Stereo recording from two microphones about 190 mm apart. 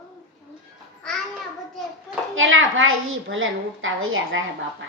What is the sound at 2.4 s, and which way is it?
A child's voice, 90° right.